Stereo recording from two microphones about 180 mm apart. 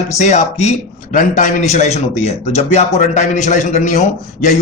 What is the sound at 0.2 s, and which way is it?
A man's voice, 40° left (ahead or behind).